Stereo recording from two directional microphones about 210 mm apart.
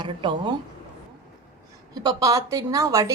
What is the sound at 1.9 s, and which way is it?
A woman's voice, 20° right (ahead or behind).